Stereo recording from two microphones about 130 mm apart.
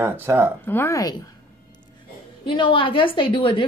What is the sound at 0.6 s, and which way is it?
Speech, 15° left (ahead or behind).